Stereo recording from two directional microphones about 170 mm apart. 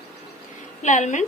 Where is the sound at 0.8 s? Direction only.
45° left (ahead or behind).